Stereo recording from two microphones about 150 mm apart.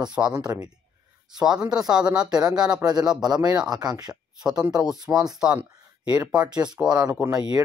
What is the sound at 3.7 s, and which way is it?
Speech, 25° right (ahead or behind).